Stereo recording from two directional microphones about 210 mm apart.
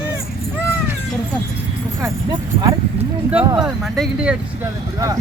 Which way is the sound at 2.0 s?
20° right (ahead or behind).